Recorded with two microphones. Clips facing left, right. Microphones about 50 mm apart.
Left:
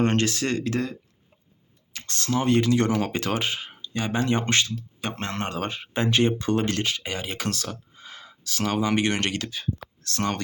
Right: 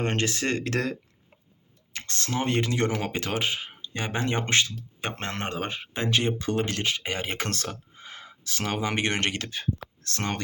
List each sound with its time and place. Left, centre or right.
0.0 s speech: centre
0.3 s speech: right
0.6 s speech: right
1.9 s speech: right; by 3.8 s centre
3.8 s speech: right
5.8 s speech: centre
6.8 s speech: right